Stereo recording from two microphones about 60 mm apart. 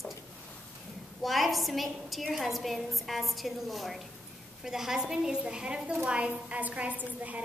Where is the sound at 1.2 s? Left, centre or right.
Centre; by 7.4 s right.